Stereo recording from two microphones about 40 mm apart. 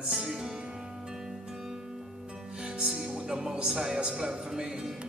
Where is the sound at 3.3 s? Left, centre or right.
Centre.